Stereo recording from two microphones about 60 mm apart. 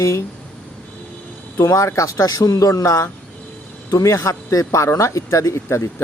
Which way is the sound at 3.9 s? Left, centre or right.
Left.